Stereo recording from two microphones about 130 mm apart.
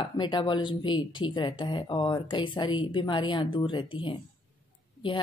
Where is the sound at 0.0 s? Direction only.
40° left (ahead or behind).